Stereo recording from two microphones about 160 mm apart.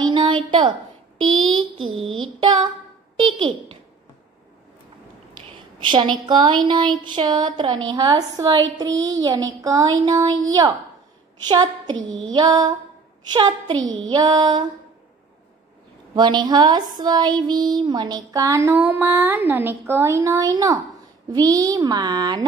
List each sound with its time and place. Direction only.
0.1 s a sound: 30° right (ahead or behind)
3.2 s a child's voice: 30° right (ahead or behind)
5.3 s speech: 30° right (ahead or behind)
16.2 s a woman's voice: 25° right (ahead or behind)